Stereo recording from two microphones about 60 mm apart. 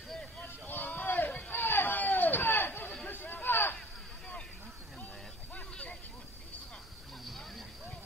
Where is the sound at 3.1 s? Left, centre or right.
Left.